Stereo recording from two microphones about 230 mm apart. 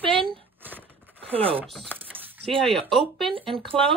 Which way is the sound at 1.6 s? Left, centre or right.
Centre.